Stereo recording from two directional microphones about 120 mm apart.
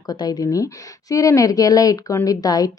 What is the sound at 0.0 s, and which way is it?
A woman's voice, 30° left (ahead or behind).